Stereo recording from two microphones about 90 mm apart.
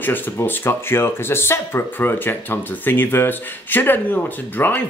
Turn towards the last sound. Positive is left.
turn(degrees=20)  # may be behind; listen again after turning